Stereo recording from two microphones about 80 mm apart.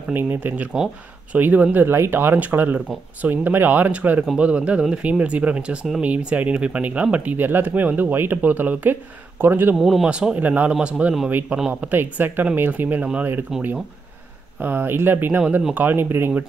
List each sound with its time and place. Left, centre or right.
0.1 s speech: right
9.8 s speech: centre
10.0 s speech: centre
11.9 s speech: right
13.5 s speech: centre
14.6 s speech: right